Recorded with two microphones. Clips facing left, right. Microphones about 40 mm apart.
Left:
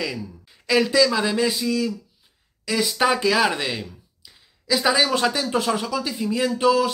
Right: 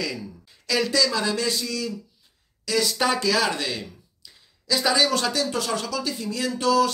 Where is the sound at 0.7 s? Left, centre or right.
Centre.